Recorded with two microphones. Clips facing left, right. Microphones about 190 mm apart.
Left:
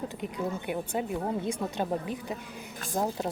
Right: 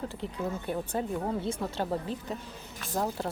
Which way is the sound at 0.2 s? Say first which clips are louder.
Left 2 dB; 15° left (ahead or behind).